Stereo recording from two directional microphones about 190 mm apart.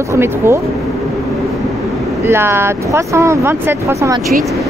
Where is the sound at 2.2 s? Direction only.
15° right (ahead or behind).